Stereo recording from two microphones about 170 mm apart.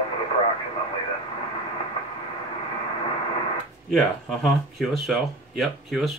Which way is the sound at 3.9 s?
Centre (ahead or behind).